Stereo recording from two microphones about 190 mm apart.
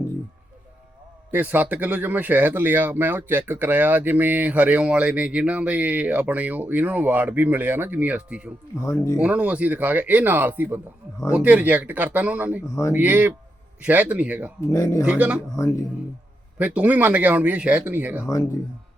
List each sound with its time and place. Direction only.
1.3 s speech: 10° right (ahead or behind)
8.8 s speech: 15° left (ahead or behind)
9.2 s speech: 5° right (ahead or behind)
12.6 s speech: 15° left (ahead or behind)
12.9 s speech: 10° right (ahead or behind)
14.7 s speech: 15° left (ahead or behind)
15.0 s speech: 5° right (ahead or behind)
15.5 s speech: 15° left (ahead or behind)
16.6 s speech: 5° right (ahead or behind)